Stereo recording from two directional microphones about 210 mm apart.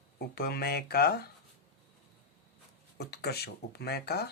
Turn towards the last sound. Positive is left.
turn(degrees=50)  # may be behind; listen again after turning